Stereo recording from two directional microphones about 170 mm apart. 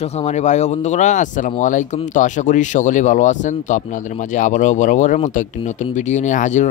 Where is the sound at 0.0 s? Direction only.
40° left (ahead or behind).